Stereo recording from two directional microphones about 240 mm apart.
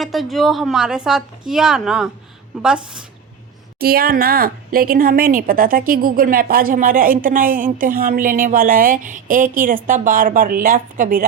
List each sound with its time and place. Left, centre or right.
0.0 s a woman's voice: centre
3.8 s a woman's voice: right